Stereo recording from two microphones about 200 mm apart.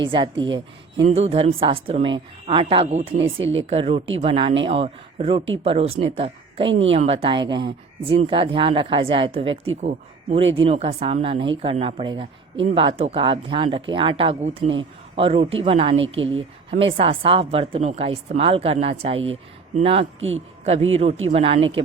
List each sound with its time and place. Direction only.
0.1 s speech: 25° right (ahead or behind)
0.4 s speech: 65° right (ahead or behind)
1.0 s speech: 30° right (ahead or behind)
3.2 s speech: 70° right (ahead or behind)
3.6 s a man's voice: 30° right (ahead or behind)
16.0 s speech: 70° right (ahead or behind)
16.3 s speech: 25° right (ahead or behind)
21.2 s speech: 30° right (ahead or behind)
21.6 s speech: 75° right (ahead or behind)